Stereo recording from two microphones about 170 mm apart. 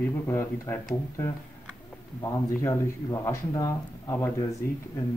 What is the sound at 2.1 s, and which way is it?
Speech, 20° left (ahead or behind).